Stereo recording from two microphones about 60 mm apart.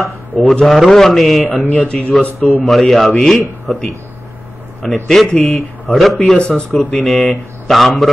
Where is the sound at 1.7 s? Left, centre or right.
Centre.